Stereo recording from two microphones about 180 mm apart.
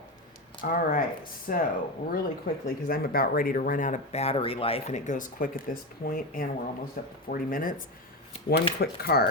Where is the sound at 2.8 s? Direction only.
55° left (ahead or behind).